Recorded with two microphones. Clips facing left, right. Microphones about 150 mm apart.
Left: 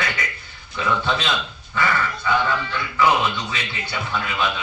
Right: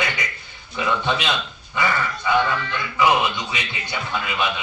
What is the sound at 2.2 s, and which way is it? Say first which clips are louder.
Music: right 2 dB; 15° right (ahead or behind).